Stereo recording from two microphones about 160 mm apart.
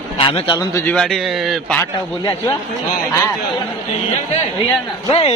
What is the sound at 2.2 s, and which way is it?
Speech, 25° left (ahead or behind).